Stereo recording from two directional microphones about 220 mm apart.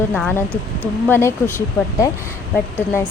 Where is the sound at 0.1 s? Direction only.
5° left (ahead or behind).